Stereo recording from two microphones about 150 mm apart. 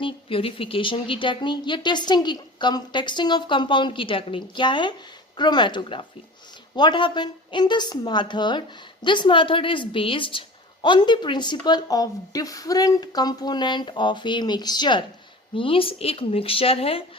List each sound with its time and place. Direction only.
0.0 s speech: 35° left (ahead or behind)